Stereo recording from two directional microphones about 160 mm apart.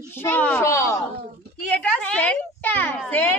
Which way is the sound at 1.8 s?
5° left (ahead or behind).